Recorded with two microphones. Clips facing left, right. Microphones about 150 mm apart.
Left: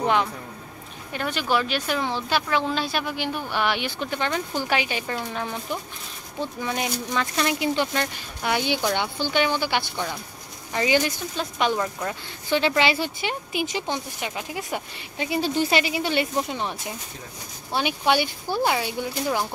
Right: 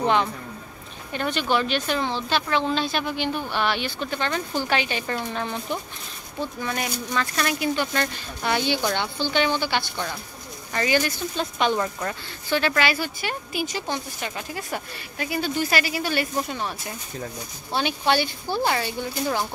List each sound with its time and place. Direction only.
0.0 s a woman's voice: 5° left (ahead or behind); by 8.0 s 25° left (ahead or behind)
8.0 s a woman's voice: 10° left (ahead or behind)
11.5 s a woman's voice: 5° left (ahead or behind)
12.4 s a woman's voice: 20° left (ahead or behind)